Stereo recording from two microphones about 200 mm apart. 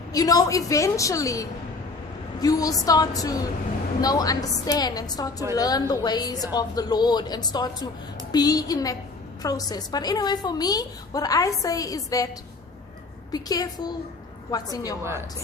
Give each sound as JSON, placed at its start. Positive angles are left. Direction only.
{"t": 0.1, "sound": "a woman's voice", "side_deg": 20}
{"t": 13.3, "sound": "a woman's voice", "side_deg": 20}